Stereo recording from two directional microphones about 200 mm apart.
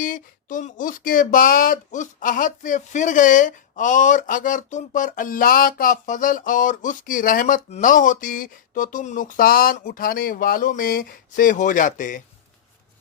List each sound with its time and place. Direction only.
0.0 s speech: 45° left (ahead or behind)